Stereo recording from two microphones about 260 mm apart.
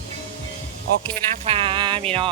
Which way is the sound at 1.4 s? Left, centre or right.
Right.